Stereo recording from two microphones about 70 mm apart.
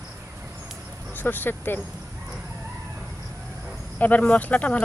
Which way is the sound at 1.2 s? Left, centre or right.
Left.